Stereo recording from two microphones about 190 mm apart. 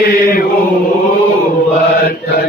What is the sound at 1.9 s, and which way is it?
Mantra, 50° left (ahead or behind).